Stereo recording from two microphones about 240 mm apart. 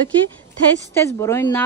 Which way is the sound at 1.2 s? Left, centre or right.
Centre.